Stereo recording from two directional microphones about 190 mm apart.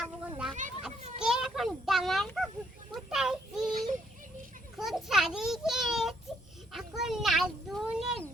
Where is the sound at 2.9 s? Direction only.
5° right (ahead or behind).